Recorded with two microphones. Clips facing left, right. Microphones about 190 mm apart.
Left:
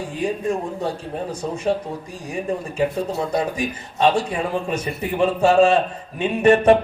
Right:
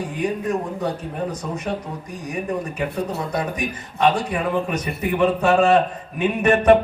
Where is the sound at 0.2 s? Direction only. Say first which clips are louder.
Left 1 dB; 25° left (ahead or behind).